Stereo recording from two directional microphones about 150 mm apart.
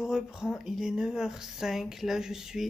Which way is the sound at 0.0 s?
5° right (ahead or behind).